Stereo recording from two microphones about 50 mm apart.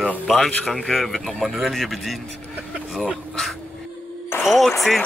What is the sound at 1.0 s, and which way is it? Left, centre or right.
Speech, centre.